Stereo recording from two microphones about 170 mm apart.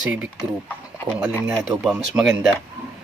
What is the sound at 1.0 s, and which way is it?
Speech, 10° right (ahead or behind).